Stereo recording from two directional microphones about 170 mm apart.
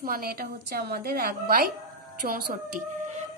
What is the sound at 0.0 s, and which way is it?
A woman's voice, 60° right (ahead or behind).